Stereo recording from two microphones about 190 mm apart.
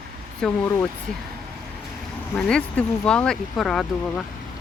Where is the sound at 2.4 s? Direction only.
5° left (ahead or behind).